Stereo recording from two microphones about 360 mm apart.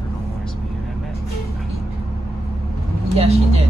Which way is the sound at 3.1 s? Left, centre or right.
Centre.